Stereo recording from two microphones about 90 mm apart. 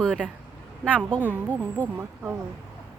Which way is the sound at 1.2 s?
20° right (ahead or behind).